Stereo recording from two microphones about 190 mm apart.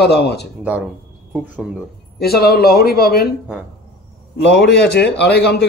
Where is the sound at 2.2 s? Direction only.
55° left (ahead or behind).